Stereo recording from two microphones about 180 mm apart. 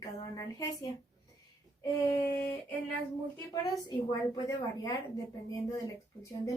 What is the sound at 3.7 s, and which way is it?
A woman's voice, 25° left (ahead or behind).